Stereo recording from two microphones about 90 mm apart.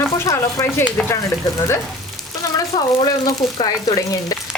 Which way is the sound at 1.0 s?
10° left (ahead or behind).